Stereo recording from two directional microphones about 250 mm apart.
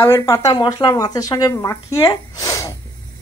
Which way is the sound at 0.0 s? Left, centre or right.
Centre.